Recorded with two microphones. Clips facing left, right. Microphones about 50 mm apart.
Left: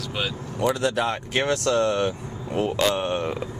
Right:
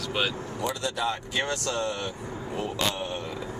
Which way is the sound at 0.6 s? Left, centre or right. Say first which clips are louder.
Left 8 dB; left.